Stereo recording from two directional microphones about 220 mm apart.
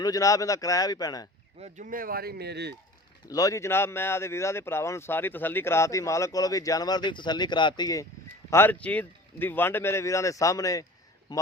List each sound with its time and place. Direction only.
0.0 s speech: 15° left (ahead or behind)
1.5 s speech: 30° right (ahead or behind); by 2.7 s 50° right (ahead or behind)
3.2 s a man's voice: 15° left (ahead or behind)